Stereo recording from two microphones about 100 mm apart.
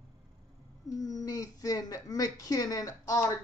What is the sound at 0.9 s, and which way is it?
Speech, 40° left (ahead or behind).